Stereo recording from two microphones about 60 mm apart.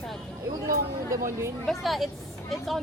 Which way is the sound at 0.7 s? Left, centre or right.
Right.